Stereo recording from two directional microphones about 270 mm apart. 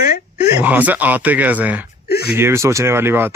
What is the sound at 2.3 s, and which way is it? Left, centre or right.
Speech, centre.